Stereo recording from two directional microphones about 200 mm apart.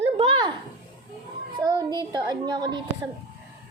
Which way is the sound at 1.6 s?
20° right (ahead or behind).